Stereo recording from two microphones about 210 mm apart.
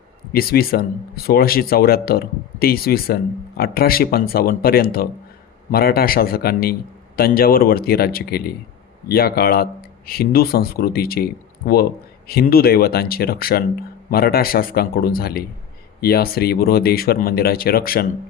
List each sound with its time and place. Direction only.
0.3 s speech: 45° left (ahead or behind)